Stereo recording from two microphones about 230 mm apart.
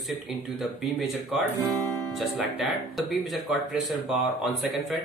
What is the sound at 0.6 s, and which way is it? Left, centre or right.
Speech, centre.